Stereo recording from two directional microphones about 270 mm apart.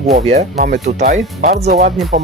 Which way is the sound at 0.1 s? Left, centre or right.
Right.